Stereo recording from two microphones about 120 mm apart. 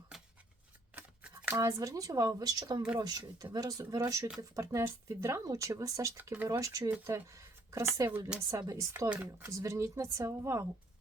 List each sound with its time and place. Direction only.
0.1 s a sound: centre (ahead or behind)
0.9 s scissors: 10° right (ahead or behind)
1.5 s speech: 25° right (ahead or behind)
9.0 s speech: 10° right (ahead or behind)
9.5 s speech: 25° right (ahead or behind)